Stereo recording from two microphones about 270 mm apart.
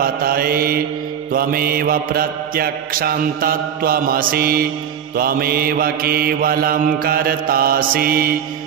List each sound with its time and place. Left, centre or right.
0.0 s mantra: right